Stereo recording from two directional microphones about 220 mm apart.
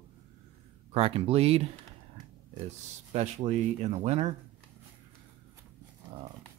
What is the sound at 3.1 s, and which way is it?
Speech, 30° right (ahead or behind).